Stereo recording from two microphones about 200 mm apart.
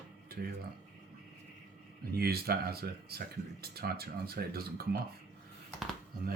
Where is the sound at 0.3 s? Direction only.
50° right (ahead or behind).